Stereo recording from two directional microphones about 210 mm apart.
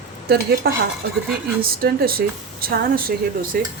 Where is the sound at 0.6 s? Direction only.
50° right (ahead or behind).